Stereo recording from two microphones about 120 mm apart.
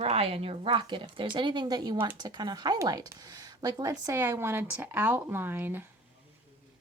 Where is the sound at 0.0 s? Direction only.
55° right (ahead or behind); by 5.9 s 15° right (ahead or behind).